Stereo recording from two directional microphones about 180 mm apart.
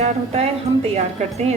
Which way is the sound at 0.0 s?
35° right (ahead or behind).